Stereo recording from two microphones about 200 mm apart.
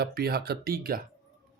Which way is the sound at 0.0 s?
50° right (ahead or behind).